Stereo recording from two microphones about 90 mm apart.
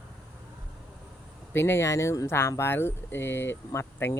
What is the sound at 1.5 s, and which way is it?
Speech, 25° left (ahead or behind).